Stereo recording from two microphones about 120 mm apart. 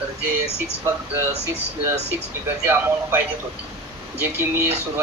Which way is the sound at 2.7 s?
20° right (ahead or behind).